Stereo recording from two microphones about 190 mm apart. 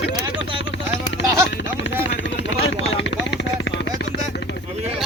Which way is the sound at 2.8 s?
80° left.